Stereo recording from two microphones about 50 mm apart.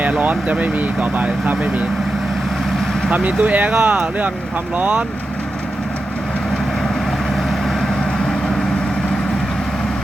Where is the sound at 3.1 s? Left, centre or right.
Right.